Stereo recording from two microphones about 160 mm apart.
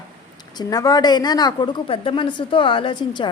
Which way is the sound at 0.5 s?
25° left (ahead or behind).